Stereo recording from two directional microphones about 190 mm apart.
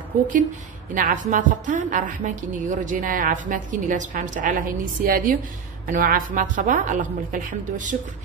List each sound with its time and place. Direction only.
0.9 s a woman's voice: 45° right (ahead or behind)